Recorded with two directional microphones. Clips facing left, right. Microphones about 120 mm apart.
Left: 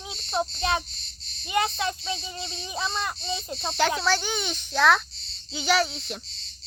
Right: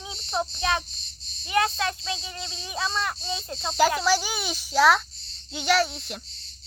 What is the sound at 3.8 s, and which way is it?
A child's voice, 5° right (ahead or behind).